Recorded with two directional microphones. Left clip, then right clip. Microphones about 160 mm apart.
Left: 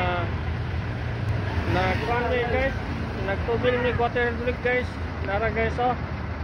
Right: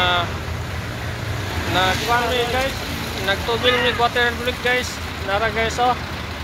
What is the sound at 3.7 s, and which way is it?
Speech, 25° right (ahead or behind).